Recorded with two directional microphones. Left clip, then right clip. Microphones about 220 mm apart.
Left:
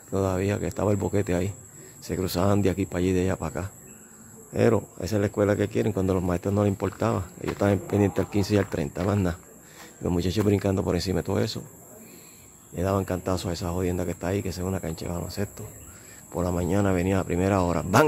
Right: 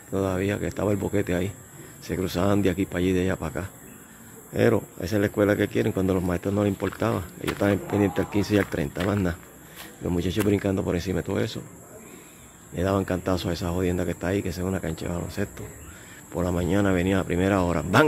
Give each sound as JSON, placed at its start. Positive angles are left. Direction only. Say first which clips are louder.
{"t": 0.1, "sound": "speech", "louder": "even", "side_deg": 15}
{"t": 12.7, "sound": "speech", "louder": "right 1 dB", "side_deg": 10}